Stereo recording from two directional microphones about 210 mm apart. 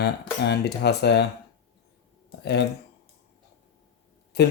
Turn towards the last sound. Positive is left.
turn(degrees=50)  # may be behind; listen again after turning